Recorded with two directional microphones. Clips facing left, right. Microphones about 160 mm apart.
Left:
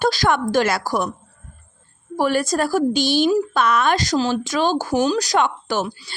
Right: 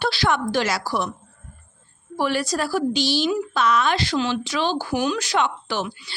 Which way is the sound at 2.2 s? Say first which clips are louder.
Left 4 dB; 45° left (ahead or behind).